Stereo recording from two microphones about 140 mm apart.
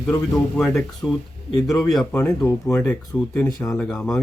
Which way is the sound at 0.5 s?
5° left (ahead or behind).